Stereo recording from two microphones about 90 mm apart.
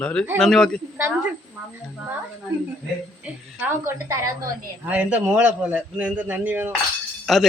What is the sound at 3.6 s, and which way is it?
A man's voice, 25° right (ahead or behind).